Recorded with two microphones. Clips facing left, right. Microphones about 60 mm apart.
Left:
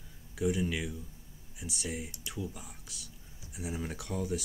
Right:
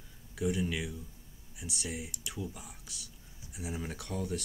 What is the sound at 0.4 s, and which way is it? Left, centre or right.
Speech, centre.